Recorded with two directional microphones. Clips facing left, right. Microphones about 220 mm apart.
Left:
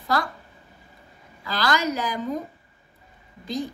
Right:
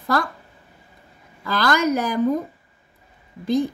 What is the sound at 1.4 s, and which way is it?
Speech, 50° right (ahead or behind).